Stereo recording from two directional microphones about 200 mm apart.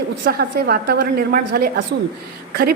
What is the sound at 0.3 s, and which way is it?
A woman's voice, 50° right (ahead or behind).